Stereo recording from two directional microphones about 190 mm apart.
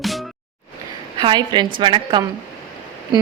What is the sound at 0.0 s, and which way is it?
Music, centre (ahead or behind).